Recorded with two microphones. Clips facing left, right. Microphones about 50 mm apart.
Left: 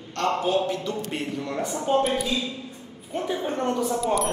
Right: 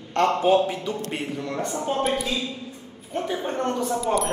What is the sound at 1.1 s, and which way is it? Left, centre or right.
Speech, centre.